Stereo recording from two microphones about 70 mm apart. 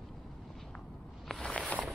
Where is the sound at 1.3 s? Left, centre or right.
Centre.